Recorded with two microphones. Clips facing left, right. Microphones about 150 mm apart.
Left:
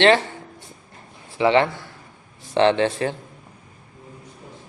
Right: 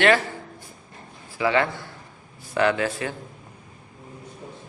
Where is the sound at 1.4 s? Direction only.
25° left (ahead or behind).